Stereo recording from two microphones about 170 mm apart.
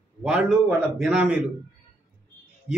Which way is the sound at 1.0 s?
5° right (ahead or behind).